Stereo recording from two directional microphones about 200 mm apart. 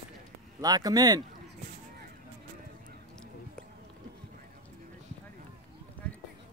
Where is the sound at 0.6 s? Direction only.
20° right (ahead or behind).